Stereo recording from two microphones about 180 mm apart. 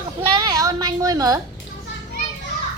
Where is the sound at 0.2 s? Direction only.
25° right (ahead or behind).